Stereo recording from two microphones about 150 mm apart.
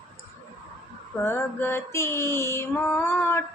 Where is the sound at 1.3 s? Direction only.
15° left (ahead or behind).